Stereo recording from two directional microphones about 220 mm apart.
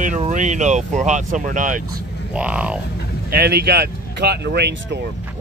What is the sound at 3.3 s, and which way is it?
Speech, 45° right (ahead or behind).